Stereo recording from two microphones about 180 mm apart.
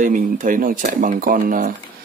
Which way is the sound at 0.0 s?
45° right (ahead or behind).